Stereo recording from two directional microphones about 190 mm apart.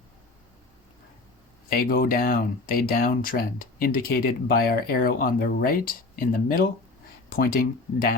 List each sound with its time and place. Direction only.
1.8 s speech: 50° left (ahead or behind)